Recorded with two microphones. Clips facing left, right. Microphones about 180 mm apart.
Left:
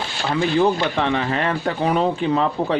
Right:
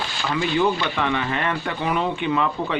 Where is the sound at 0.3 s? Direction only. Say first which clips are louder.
Left 3 dB; 35° left (ahead or behind).